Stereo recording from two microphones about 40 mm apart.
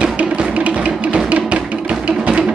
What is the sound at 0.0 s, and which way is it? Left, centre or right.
Music, right.